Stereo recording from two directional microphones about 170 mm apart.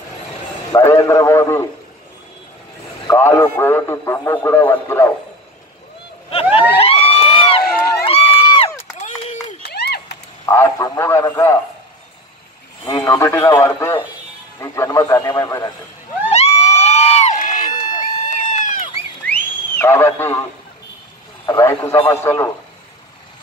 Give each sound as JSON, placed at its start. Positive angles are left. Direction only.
{"t": 0.7, "sound": "a man's voice", "side_deg": 20}
{"t": 3.1, "sound": "a man's voice", "side_deg": 15}
{"t": 6.8, "sound": "a sound", "side_deg": 35}
{"t": 8.0, "sound": "crowd", "side_deg": 35}
{"t": 9.0, "sound": "run", "side_deg": 45}
{"t": 9.6, "sound": "a sound", "side_deg": 80}
{"t": 10.4, "sound": "a man's voice", "side_deg": 15}
{"t": 12.8, "sound": "a man's voice", "side_deg": 25}
{"t": 16.3, "sound": "crowd", "side_deg": 40}
{"t": 17.4, "sound": "run", "side_deg": 55}
{"t": 19.2, "sound": "a sound", "side_deg": 10}
{"t": 21.5, "sound": "a man's voice", "side_deg": 15}